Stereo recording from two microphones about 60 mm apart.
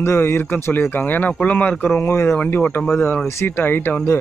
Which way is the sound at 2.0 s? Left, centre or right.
Left.